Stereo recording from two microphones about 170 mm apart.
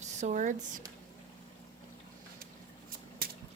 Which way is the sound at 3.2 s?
60° right (ahead or behind).